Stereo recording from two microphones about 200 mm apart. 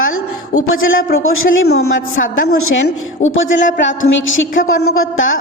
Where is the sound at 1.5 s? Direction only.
55° left (ahead or behind).